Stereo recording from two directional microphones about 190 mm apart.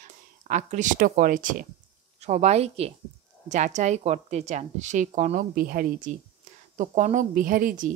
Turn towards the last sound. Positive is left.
turn(degrees=-45)  # may be behind; listen again after turning